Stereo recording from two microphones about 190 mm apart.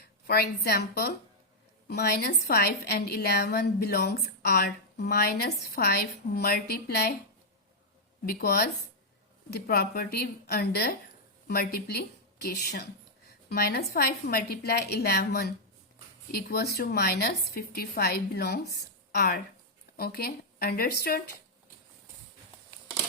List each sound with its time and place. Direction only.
0.0 s a woman's voice: 55° left (ahead or behind)
8.3 s a woman's voice: 55° left (ahead or behind)